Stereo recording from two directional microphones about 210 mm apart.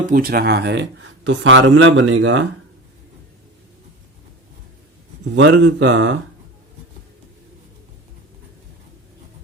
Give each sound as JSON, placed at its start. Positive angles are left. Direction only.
{"t": 0.0, "sound": "speech", "side_deg": -40}
{"t": 5.4, "sound": "speech", "side_deg": -60}